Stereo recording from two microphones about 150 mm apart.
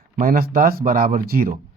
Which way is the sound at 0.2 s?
70° right (ahead or behind).